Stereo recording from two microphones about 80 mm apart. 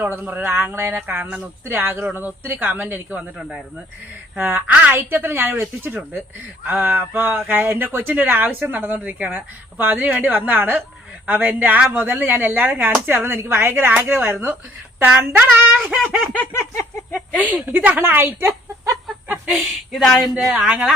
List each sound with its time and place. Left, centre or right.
0.0 s speech: right
2.9 s speech: centre
16.3 s a sound: centre
16.6 s a sound: left
17.4 s speech: right
19.0 s speech: centre